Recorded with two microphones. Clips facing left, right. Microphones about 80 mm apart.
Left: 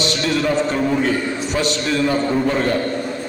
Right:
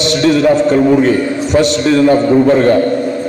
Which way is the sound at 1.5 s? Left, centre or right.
Right.